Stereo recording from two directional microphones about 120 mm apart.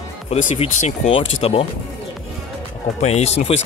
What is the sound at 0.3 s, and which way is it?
Speech, 65° left (ahead or behind).